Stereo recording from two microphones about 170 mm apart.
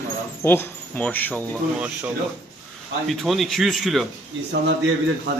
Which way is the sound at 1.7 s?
10° right (ahead or behind).